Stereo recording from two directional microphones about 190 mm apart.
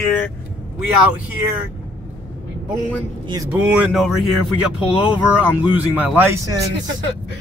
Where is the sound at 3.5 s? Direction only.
5° right (ahead or behind).